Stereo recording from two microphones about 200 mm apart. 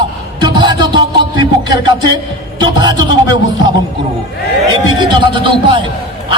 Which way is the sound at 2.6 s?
20° right (ahead or behind).